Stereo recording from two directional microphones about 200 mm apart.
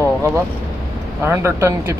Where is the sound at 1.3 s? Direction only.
15° right (ahead or behind).